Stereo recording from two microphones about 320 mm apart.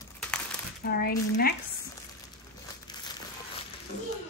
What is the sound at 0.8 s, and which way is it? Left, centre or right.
Speech, left.